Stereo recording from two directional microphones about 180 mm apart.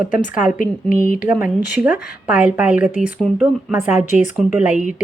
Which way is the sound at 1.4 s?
5° right (ahead or behind).